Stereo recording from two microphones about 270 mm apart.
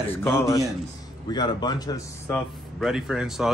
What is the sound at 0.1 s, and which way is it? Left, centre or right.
Speech, centre.